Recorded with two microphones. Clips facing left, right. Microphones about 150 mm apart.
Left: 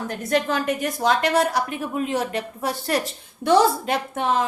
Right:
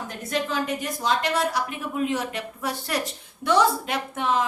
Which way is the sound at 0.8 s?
50° left (ahead or behind).